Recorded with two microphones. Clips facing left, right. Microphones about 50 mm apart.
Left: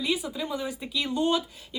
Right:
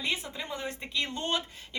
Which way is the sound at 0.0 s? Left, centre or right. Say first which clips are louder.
Left 4 dB; right.